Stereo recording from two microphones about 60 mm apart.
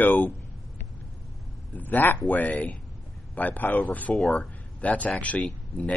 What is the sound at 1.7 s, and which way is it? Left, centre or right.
Speech, left.